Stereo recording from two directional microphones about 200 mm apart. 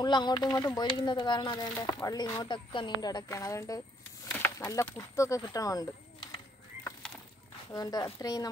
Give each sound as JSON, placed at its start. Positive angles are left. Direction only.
{"t": 0.0, "sound": "speech", "side_deg": 20}
{"t": 7.7, "sound": "speech", "side_deg": 20}